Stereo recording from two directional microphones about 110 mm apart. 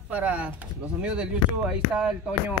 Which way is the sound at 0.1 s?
10° right (ahead or behind).